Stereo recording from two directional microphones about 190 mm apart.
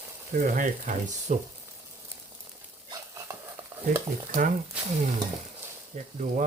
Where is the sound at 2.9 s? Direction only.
15° right (ahead or behind).